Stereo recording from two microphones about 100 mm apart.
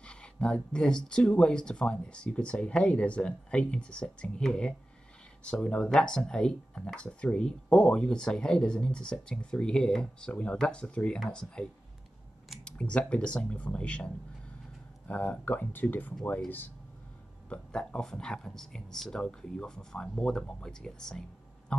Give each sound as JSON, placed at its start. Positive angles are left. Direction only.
{"t": 0.0, "sound": "speech", "side_deg": 10}
{"t": 12.6, "sound": "speech", "side_deg": 10}
{"t": 17.5, "sound": "speech", "side_deg": 5}